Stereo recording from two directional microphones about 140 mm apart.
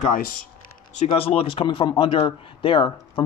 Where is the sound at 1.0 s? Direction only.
45° left (ahead or behind).